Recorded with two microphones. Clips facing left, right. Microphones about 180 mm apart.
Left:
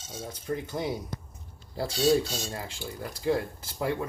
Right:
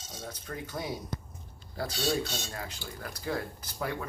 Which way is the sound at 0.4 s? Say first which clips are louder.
Left 7 dB; 20° left (ahead or behind).